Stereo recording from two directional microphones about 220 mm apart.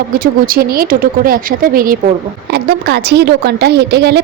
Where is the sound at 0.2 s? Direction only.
40° right (ahead or behind).